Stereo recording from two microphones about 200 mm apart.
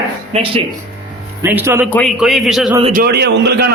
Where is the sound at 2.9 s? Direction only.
50° right (ahead or behind).